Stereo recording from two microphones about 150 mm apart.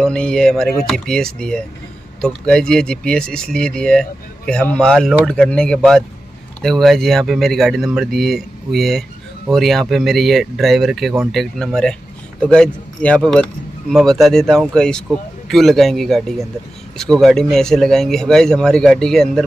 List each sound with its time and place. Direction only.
0.0 s speech: 5° left (ahead or behind)